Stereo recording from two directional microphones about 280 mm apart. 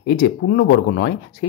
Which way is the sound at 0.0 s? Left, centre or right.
Left.